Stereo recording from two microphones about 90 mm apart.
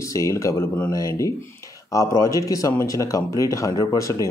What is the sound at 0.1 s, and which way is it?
Speech, 35° left (ahead or behind).